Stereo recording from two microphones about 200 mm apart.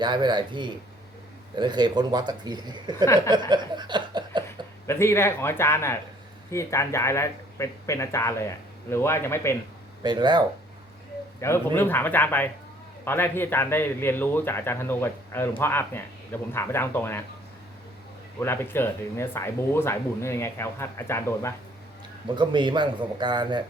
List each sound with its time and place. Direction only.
0.0 s speech: 20° right (ahead or behind)
3.5 s a sound: 20° right (ahead or behind)
4.9 s speech: 15° left (ahead or behind)
10.0 s speech: 20° right (ahead or behind)
11.3 s speech: 15° left (ahead or behind)
18.3 s speech: 10° left (ahead or behind)
22.4 s speech: 25° right (ahead or behind)